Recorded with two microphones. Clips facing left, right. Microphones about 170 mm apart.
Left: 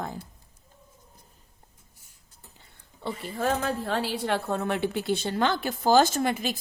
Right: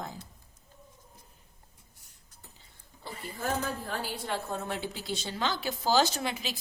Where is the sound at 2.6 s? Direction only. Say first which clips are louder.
Left 11 dB; 75° left (ahead or behind).